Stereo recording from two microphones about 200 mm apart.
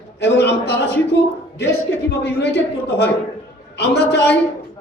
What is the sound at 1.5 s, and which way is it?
A man's voice, 60° left (ahead or behind).